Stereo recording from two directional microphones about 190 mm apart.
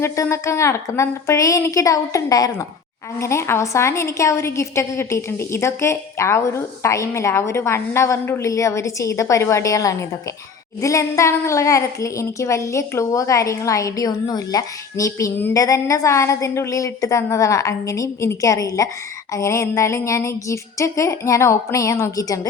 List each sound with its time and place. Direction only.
0.0 s a woman's voice: 15° left (ahead or behind)